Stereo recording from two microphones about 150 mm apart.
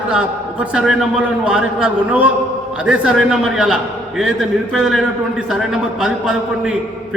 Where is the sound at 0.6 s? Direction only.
5° right (ahead or behind).